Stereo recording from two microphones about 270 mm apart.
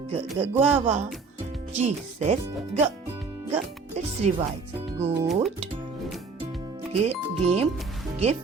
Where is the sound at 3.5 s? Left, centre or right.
Right.